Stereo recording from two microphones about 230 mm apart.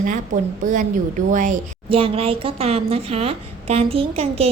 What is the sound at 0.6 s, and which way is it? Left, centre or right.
A woman's voice, right.